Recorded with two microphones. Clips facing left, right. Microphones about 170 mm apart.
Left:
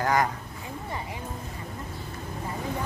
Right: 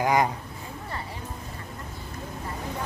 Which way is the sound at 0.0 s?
20° right (ahead or behind).